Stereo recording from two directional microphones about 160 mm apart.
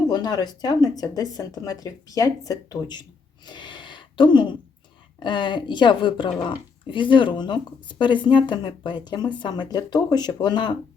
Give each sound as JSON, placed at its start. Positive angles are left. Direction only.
{"t": 0.1, "sound": "speech", "side_deg": 25}
{"t": 3.4, "sound": "a sound", "side_deg": 30}
{"t": 5.2, "sound": "speech", "side_deg": 30}